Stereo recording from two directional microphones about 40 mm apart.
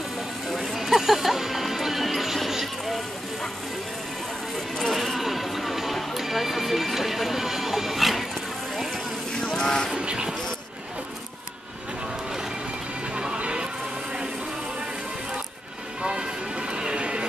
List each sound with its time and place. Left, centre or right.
0.5 s music: centre
4.9 s a sound: centre
8.9 s vehicle: centre
9.9 s vehicle: right
13.1 s music: right
16.0 s music: right